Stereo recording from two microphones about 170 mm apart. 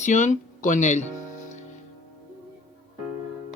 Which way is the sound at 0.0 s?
45° left (ahead or behind).